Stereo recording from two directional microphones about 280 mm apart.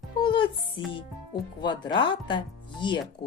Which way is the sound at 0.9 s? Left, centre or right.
Centre.